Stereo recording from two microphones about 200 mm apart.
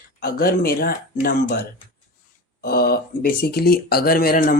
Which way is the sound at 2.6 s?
50° left (ahead or behind).